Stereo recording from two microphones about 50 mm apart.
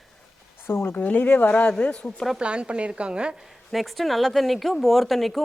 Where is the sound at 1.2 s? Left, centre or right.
Left.